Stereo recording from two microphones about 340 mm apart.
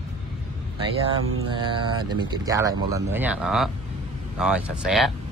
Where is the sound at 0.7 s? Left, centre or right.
Centre.